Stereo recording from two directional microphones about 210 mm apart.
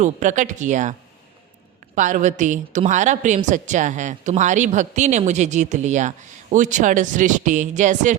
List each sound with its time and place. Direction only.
0.0 s a woman's voice: 35° right (ahead or behind)
2.0 s a woman's voice: 35° right (ahead or behind)